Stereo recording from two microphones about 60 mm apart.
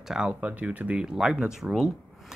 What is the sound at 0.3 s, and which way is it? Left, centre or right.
Speech, right.